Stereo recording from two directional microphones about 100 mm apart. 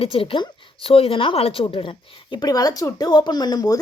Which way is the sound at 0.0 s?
65° left (ahead or behind).